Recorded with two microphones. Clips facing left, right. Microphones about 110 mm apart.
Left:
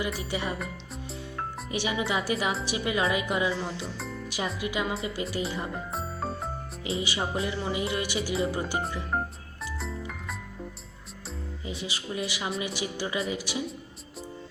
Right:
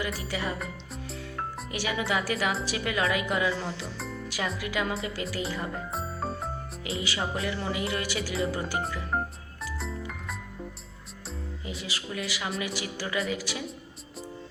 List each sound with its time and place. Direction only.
0.3 s music: 20° left (ahead or behind)
1.7 s music: 20° left (ahead or behind)
4.0 s music: centre (ahead or behind)
4.3 s music: 20° left (ahead or behind)
5.9 s music: centre (ahead or behind)
6.8 s music: 25° left (ahead or behind)
11.6 s speech: 25° left (ahead or behind)
12.5 s music: 25° left (ahead or behind)